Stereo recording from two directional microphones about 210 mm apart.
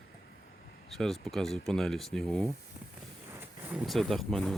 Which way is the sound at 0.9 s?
Centre (ahead or behind).